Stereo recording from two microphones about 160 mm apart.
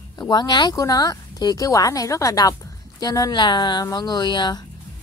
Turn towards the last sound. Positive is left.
turn(degrees=30)  # may be behind; listen again after turning